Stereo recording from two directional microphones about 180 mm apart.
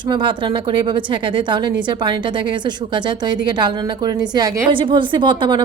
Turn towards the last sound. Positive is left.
turn(degrees=-25)  # may be behind; listen again after turning